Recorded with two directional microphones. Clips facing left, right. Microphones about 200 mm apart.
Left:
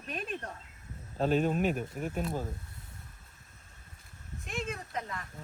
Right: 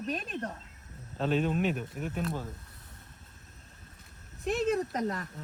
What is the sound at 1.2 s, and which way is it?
Speech, 40° left (ahead or behind).